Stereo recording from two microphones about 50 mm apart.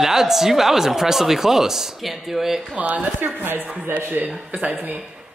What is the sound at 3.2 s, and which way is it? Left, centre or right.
Speech, right.